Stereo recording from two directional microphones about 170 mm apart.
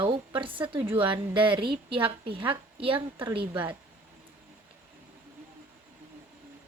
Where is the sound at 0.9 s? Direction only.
30° right (ahead or behind).